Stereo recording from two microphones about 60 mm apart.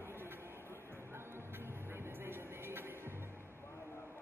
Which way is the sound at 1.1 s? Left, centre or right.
Right.